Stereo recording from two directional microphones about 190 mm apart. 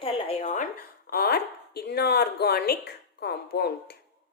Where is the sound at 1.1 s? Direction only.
55° left (ahead or behind).